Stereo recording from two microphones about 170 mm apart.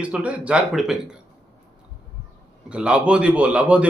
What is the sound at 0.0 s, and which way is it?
Speech, 5° right (ahead or behind).